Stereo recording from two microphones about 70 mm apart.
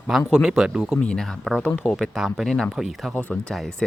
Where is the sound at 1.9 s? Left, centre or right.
Centre.